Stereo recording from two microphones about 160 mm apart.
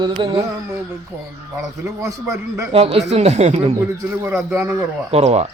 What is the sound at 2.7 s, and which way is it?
Speech, 35° right (ahead or behind).